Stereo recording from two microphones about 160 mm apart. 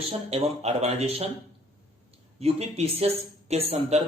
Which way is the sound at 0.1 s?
40° right (ahead or behind).